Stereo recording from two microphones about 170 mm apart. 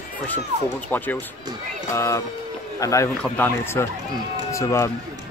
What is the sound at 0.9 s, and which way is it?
Speech, 10° left (ahead or behind).